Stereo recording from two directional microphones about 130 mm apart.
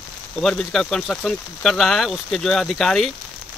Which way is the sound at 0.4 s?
5° left (ahead or behind).